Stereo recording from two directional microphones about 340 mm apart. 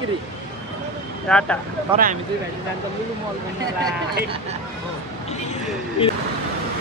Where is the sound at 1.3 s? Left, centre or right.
Centre.